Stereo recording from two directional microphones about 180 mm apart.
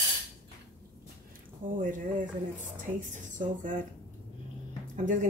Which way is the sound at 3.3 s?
45° right (ahead or behind).